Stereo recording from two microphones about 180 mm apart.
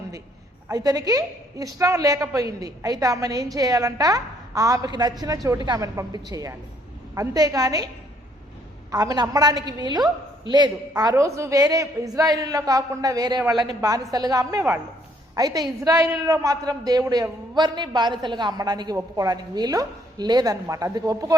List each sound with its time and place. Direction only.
0.7 s a woman's voice: 20° right (ahead or behind)
8.9 s a woman's voice: 20° right (ahead or behind)